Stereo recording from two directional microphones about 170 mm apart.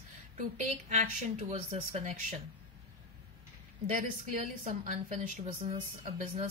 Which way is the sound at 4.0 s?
45° right (ahead or behind).